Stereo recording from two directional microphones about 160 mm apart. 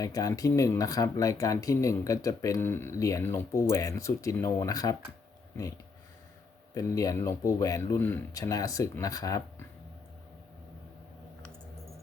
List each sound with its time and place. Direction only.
0.0 s speech: 20° left (ahead or behind)
6.7 s speech: 20° left (ahead or behind)